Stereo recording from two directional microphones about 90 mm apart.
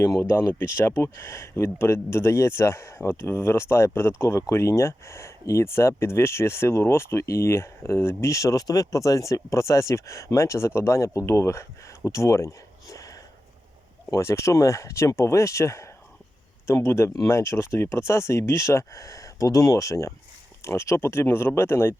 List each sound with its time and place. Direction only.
0.0 s speech: 30° left (ahead or behind)